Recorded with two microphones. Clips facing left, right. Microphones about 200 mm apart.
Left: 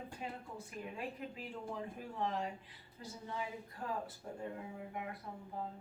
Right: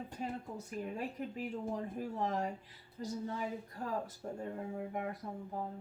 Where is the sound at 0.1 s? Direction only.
40° right (ahead or behind).